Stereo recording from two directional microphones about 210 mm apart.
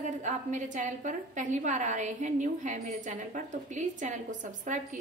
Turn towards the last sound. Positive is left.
turn(degrees=-35)  # may be behind; listen again after turning